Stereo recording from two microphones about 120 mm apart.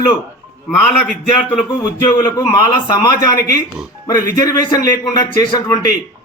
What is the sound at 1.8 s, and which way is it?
Speech, 35° left (ahead or behind).